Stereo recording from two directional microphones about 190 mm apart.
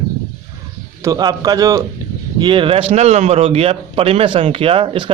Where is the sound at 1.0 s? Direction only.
20° right (ahead or behind).